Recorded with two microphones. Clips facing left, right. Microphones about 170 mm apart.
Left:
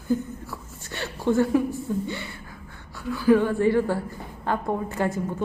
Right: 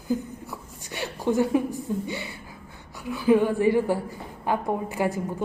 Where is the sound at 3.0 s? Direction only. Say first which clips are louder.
Left 1 dB; 20° right (ahead or behind).